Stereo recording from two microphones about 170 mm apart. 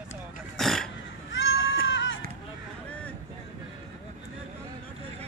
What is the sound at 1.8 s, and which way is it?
Run, 90° left.